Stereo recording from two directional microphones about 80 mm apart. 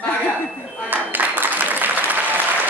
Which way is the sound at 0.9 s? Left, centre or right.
Right.